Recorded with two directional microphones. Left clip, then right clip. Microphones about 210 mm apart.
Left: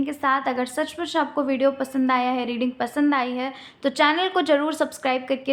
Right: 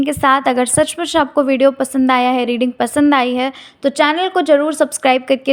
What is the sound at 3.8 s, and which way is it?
A woman's voice, 25° right (ahead or behind).